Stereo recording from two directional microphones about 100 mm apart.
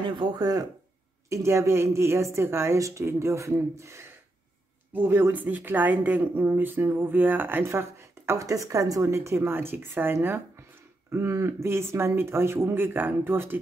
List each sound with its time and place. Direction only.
0.0 s speech: 50° right (ahead or behind)
1.3 s speech: 30° right (ahead or behind)